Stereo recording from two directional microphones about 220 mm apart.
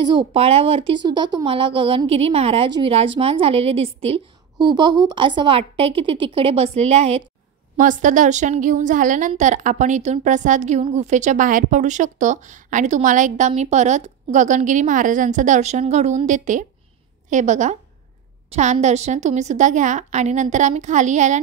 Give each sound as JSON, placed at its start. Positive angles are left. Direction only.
{"t": 0.0, "sound": "a woman's voice", "side_deg": -20}